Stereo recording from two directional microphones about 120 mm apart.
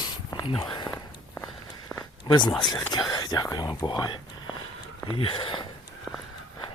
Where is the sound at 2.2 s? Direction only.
35° left (ahead or behind).